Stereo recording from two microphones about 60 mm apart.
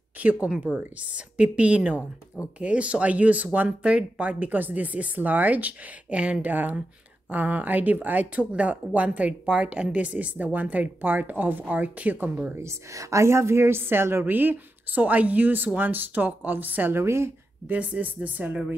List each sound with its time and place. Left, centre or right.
0.2 s speech: right
6.5 s a woman's voice: right
12.5 s a woman's voice: right
16.9 s a woman's voice: right
17.6 s speech: right